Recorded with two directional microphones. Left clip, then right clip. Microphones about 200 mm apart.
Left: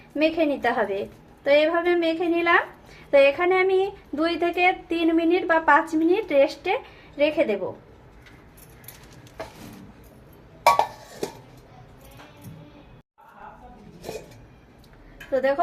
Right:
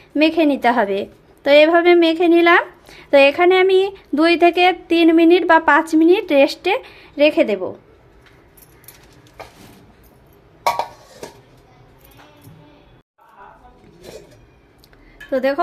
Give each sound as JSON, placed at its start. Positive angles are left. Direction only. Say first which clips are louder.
{"t": 0.2, "sound": "speech", "louder": "right 7 dB", "side_deg": -50}
{"t": 15.3, "sound": "speech", "louder": "right 4 dB", "side_deg": -50}